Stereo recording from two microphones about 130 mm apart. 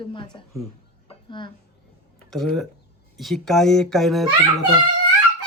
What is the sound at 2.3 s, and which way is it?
Speech, 5° left (ahead or behind).